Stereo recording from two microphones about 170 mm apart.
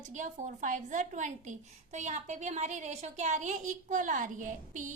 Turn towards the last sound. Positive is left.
turn(degrees=-50)  # may be behind; listen again after turning